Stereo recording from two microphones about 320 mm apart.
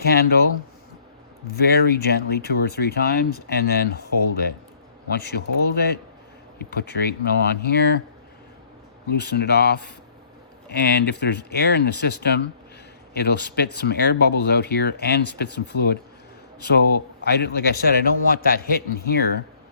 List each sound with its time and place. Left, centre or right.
0.0 s speech: left
1.5 s speech: left
9.2 s speech: left